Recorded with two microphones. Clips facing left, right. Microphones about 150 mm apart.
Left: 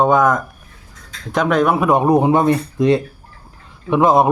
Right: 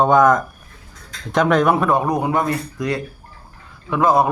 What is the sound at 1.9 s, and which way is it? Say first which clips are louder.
A man's voice: left 5 dB; 25° left (ahead or behind).